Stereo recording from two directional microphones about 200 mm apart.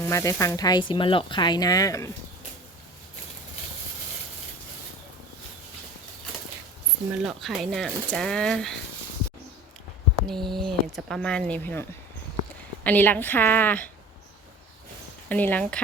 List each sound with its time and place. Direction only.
0.0 s speech: 15° left (ahead or behind)
7.2 s speech: centre (ahead or behind)
10.2 s a woman's voice: centre (ahead or behind)
15.3 s a woman's voice: 10° left (ahead or behind)